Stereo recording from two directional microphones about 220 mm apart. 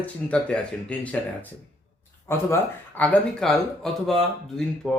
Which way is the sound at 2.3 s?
10° left (ahead or behind).